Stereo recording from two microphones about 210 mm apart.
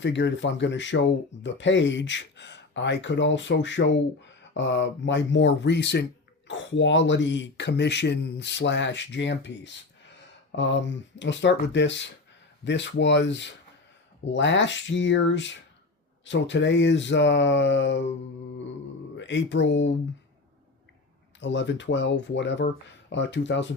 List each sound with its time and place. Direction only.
0.0 s speech: 55° left (ahead or behind)
19.1 s speech: 60° left (ahead or behind)
21.4 s speech: 60° left (ahead or behind)